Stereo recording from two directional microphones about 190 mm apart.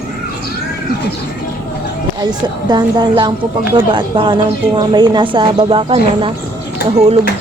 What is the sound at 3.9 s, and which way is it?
A woman's voice, 25° right (ahead or behind).